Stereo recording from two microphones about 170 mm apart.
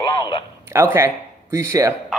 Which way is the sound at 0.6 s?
15° right (ahead or behind).